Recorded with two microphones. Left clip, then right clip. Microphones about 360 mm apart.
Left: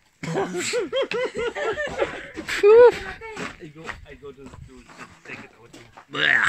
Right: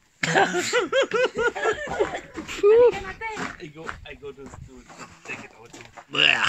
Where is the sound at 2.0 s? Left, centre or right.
Left.